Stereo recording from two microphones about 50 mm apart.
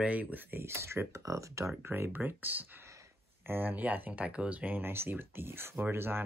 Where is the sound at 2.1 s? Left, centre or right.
Right.